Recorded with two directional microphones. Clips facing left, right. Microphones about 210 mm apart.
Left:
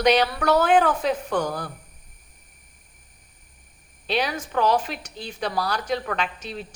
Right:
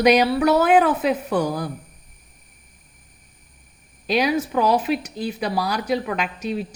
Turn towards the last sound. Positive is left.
turn(degrees=-10)  # may be behind; listen again after turning